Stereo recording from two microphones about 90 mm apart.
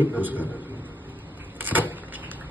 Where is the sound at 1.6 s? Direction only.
20° right (ahead or behind).